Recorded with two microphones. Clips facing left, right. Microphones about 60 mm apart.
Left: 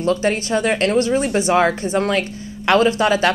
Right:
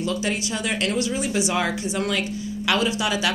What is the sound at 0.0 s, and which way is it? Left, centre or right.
Speech, left.